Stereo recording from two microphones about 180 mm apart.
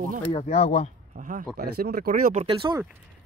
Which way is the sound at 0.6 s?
35° left (ahead or behind).